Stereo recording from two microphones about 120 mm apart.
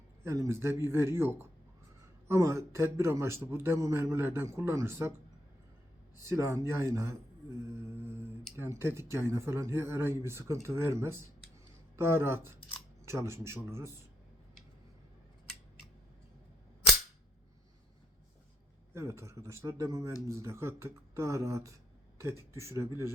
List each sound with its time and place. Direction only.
0.3 s a man's voice: 25° right (ahead or behind)
6.2 s a man's voice: 25° right (ahead or behind)
18.9 s a man's voice: 25° right (ahead or behind)